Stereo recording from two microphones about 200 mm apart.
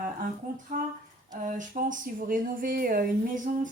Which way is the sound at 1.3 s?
40° right (ahead or behind).